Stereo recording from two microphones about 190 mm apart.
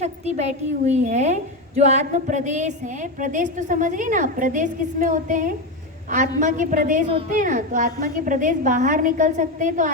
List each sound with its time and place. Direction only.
0.0 s a woman's voice: 35° right (ahead or behind)